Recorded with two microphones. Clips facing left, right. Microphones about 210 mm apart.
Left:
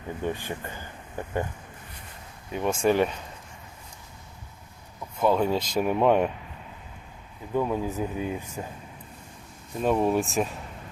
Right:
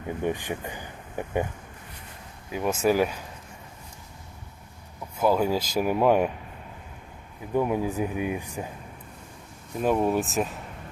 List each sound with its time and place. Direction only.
0.2 s speech: 15° right (ahead or behind)
2.5 s speech: 5° right (ahead or behind)
5.1 s speech: 5° right (ahead or behind)
7.5 s speech: 15° right (ahead or behind)
9.8 s speech: centre (ahead or behind)